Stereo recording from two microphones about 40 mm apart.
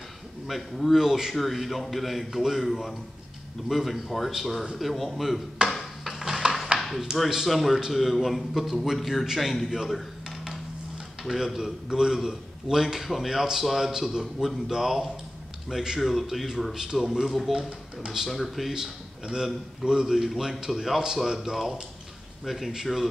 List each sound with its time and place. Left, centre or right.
0.5 s a man's voice: centre
5.8 s a sound: centre
7.1 s a man's voice: centre
7.4 s a man's voice: centre
9.8 s dishes: centre
11.2 s a man's voice: centre
16.0 s a man's voice: centre
18.7 s a man's voice: centre